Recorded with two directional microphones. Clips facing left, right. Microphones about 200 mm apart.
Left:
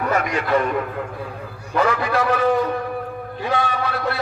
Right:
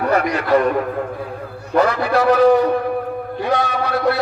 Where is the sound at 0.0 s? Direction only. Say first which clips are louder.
Right 4 dB; 40° right (ahead or behind).